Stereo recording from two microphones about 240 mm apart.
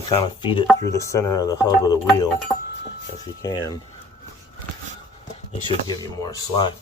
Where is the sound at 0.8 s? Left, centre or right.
Centre.